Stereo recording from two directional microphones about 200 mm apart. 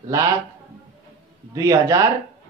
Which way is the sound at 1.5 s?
15° right (ahead or behind).